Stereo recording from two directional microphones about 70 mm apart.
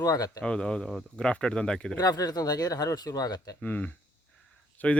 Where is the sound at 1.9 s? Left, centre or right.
Left.